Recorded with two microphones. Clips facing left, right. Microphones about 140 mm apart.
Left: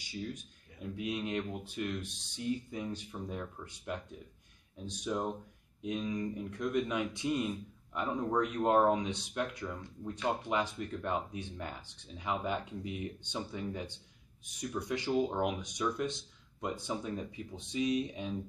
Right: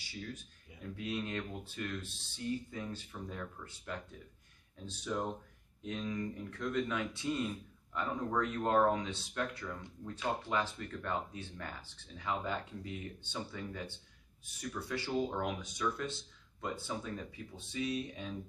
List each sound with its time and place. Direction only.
0.8 s speech: 15° left (ahead or behind)